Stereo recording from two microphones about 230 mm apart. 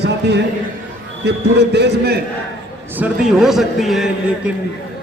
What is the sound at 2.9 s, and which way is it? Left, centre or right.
A man's voice, centre.